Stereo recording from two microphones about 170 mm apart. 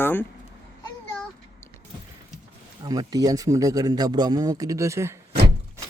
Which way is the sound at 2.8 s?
20° right (ahead or behind).